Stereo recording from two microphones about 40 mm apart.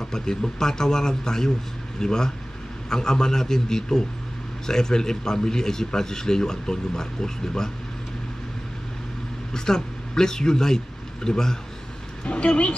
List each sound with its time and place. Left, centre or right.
0.0 s a man's voice: centre
9.5 s a man's voice: centre
12.3 s speech: left